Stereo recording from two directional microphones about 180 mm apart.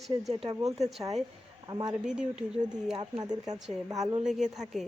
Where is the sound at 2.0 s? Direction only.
5° right (ahead or behind).